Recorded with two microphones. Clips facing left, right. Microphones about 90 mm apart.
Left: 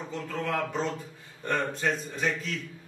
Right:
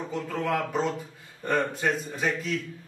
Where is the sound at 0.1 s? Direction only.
10° right (ahead or behind).